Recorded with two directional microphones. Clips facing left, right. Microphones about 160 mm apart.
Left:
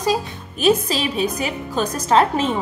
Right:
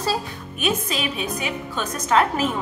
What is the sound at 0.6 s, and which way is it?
A woman's voice, 30° left (ahead or behind).